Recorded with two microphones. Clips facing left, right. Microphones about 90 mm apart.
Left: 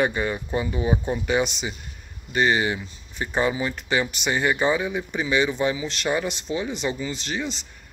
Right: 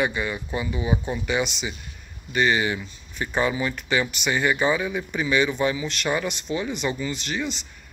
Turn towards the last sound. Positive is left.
turn(degrees=30)  # may be behind; listen again after turning